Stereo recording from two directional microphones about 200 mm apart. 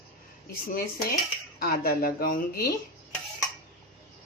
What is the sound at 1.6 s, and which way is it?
Speech, 50° left (ahead or behind).